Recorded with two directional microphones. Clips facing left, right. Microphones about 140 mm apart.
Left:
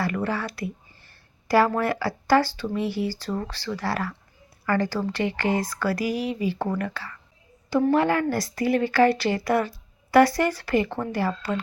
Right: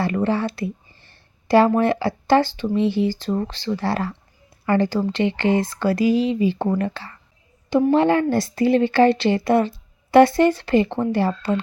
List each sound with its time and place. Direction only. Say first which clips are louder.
0.0 s a woman's voice: right 6 dB; 25° right (ahead or behind)